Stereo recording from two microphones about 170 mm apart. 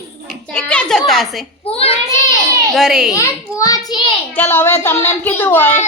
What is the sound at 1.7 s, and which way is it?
Speech, 35° left (ahead or behind).